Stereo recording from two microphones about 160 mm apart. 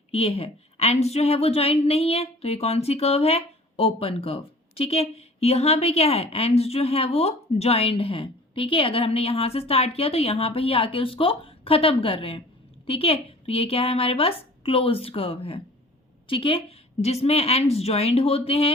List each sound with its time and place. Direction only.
0.1 s a woman's voice: 40° left (ahead or behind)